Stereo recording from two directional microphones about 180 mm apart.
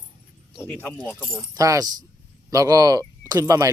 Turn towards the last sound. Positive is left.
turn(degrees=-15)  # may be behind; listen again after turning